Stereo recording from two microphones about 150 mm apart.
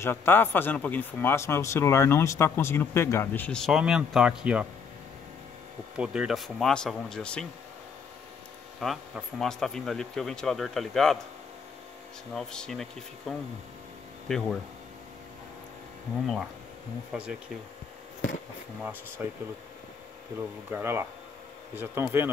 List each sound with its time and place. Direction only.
0.0 s speech: 15° left (ahead or behind); by 4.6 s 5° right (ahead or behind)
5.9 s speech: 5° right (ahead or behind)
8.7 s speech: centre (ahead or behind)
12.4 s speech: 5° left (ahead or behind)
17.1 s speech: 5° right (ahead or behind)
18.8 s speech: 10° right (ahead or behind)
20.7 s speech: 15° right (ahead or behind)